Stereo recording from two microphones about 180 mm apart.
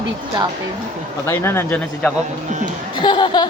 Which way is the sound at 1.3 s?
15° left (ahead or behind).